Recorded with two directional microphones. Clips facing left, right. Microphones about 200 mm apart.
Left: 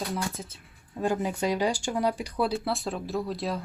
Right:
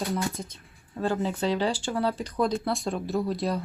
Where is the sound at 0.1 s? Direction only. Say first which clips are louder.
Right 3 dB; 5° left (ahead or behind).